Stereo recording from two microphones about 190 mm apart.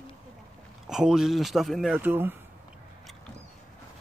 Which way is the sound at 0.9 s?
5° right (ahead or behind).